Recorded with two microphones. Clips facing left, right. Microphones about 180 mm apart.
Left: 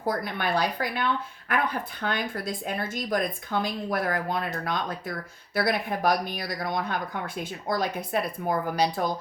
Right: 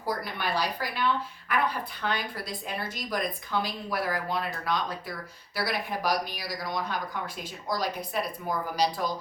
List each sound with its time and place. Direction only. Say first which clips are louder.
0.0 s a woman's voice: left 3 dB; 55° left (ahead or behind)